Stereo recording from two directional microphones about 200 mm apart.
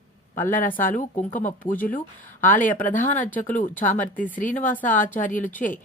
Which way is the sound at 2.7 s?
40° left (ahead or behind).